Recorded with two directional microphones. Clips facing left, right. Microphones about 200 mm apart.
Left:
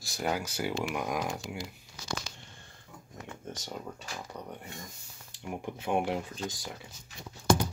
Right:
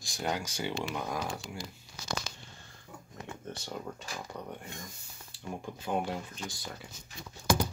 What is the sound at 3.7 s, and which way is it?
Speech, 5° left (ahead or behind).